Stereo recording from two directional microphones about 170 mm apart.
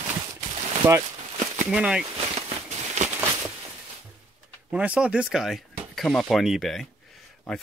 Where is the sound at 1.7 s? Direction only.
5° right (ahead or behind).